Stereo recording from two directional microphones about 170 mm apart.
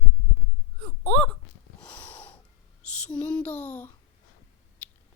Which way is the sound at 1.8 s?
10° left (ahead or behind).